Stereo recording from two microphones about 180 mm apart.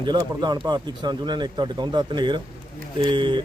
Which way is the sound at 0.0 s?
25° right (ahead or behind).